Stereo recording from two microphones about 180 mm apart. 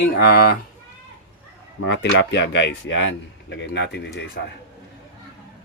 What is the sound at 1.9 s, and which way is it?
Speech, 80° left.